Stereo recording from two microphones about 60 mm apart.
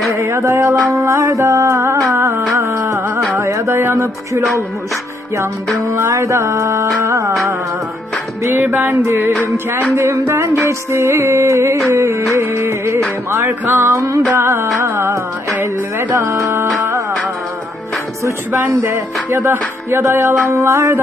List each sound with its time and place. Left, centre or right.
0.1 s music: right
3.7 s a sound: right
5.9 s music: right
8.7 s music: right
13.9 s music: right
14.3 s music: right
18.5 s music: right
20.5 s music: right